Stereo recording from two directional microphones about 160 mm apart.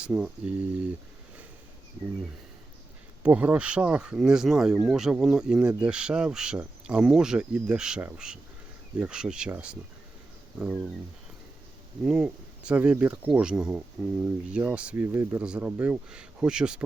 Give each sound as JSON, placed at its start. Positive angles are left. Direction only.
{"t": 0.0, "sound": "speech", "side_deg": -5}
{"t": 3.2, "sound": "speech", "side_deg": -10}
{"t": 12.0, "sound": "speech", "side_deg": -5}